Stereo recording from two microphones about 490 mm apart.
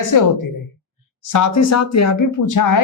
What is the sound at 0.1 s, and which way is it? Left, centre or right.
Speech, left.